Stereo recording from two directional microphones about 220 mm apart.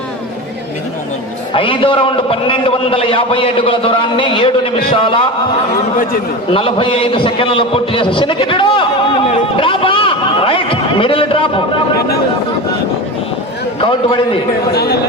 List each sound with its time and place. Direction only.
1.5 s a man's voice: 25° left (ahead or behind)
6.5 s a man's voice: 25° left (ahead or behind)
13.8 s a man's voice: 25° left (ahead or behind)
14.7 s a man's voice: 45° left (ahead or behind)